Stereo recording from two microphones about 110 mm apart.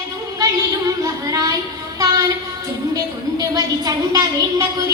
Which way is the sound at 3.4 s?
35° right (ahead or behind).